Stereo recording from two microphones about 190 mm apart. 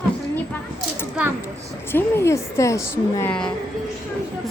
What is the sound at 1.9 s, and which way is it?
A woman's voice, 15° left (ahead or behind).